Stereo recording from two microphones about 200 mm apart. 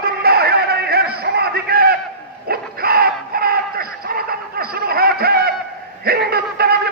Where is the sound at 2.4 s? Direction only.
50° right (ahead or behind).